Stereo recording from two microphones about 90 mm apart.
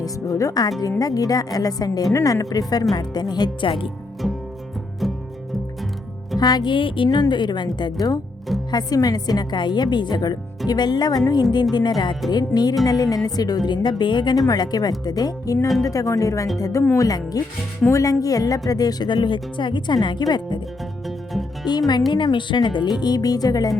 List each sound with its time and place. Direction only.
0.0 s speech: 40° left (ahead or behind); by 3.8 s 70° left (ahead or behind)
6.4 s a woman's voice: 50° left (ahead or behind)
13.7 s a woman's voice: 60° left (ahead or behind)
14.3 s speech: 45° left (ahead or behind)
21.7 s speech: 50° left (ahead or behind)